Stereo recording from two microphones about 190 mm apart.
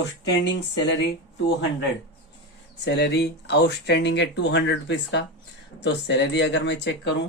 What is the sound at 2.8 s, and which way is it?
Speech, 65° left (ahead or behind).